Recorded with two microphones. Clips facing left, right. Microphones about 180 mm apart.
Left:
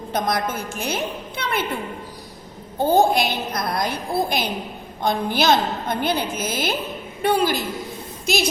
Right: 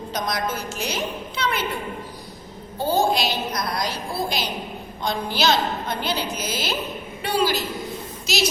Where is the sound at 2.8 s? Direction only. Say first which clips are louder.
Left 4 dB; 55° left (ahead or behind).